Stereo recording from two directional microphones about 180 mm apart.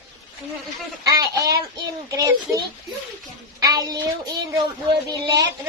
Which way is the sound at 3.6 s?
20° right (ahead or behind).